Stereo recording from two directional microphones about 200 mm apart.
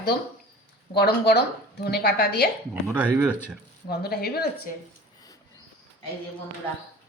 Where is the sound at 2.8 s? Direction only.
10° right (ahead or behind).